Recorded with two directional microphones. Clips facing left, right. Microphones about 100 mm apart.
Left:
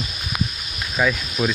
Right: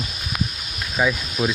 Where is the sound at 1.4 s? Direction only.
Centre (ahead or behind).